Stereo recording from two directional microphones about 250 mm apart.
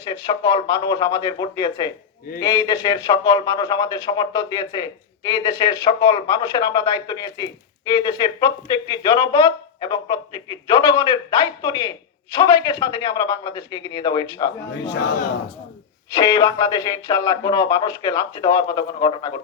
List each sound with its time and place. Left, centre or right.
0.0 s speech: centre
16.1 s speech: centre